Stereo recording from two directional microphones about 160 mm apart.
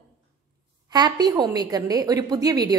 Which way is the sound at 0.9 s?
25° right (ahead or behind).